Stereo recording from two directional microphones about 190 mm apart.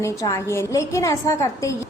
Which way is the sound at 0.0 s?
15° left (ahead or behind).